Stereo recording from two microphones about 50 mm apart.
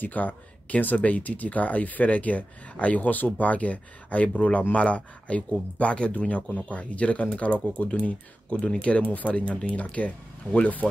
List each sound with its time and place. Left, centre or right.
0.0 s speech: left